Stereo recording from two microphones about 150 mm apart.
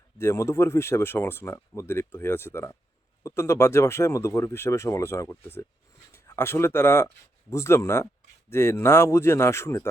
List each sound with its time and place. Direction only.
0.2 s speech: 15° left (ahead or behind)